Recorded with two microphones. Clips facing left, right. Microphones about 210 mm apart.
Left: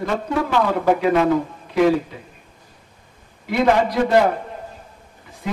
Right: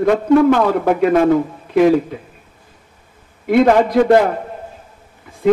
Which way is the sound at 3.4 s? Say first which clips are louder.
Right 6 dB; 55° right (ahead or behind).